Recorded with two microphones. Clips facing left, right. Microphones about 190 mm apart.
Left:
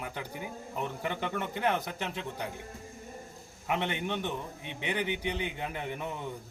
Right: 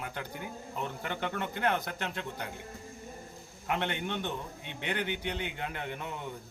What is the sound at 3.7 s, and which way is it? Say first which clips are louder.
A man's voice: left 1 dB; 5° left (ahead or behind).